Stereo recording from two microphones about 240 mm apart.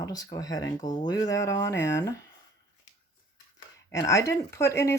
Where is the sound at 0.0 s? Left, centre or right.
Centre.